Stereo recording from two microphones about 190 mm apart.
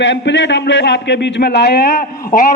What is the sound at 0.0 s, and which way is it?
A man's voice, 70° left (ahead or behind).